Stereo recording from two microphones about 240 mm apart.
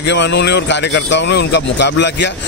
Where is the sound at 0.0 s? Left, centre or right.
Left.